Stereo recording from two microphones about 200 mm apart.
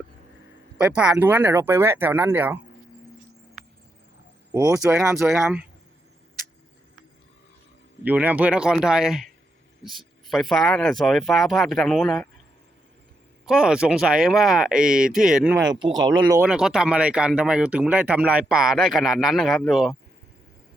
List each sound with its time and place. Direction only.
0.8 s speech: 5° right (ahead or behind)
4.5 s speech: 20° right (ahead or behind)
4.9 s speech: centre (ahead or behind)
8.0 s speech: 10° right (ahead or behind)
10.2 s speech: centre (ahead or behind)
13.4 s speech: 5° right (ahead or behind)
15.6 s speech: 20° right (ahead or behind)
16.3 s speech: 5° right (ahead or behind)